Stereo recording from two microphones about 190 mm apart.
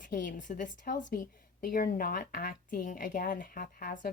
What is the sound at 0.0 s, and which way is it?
A woman's voice, 45° left (ahead or behind).